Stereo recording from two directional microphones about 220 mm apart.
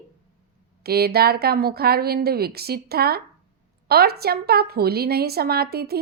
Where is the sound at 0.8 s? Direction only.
45° right (ahead or behind).